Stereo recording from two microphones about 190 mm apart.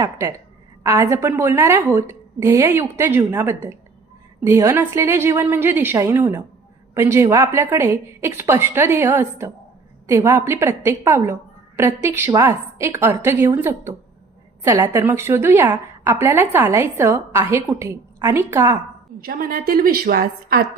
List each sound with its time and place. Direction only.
0.0 s a woman's voice: 15° right (ahead or behind)
19.2 s a woman's voice: 50° right (ahead or behind)